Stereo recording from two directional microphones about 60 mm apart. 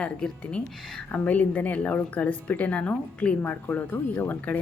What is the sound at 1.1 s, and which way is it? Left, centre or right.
Speech, left.